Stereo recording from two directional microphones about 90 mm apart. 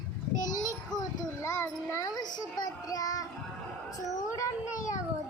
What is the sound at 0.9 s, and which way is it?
Children playing, 35° left (ahead or behind).